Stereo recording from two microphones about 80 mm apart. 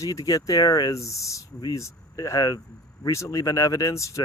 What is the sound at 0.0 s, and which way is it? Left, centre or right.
Speech, left.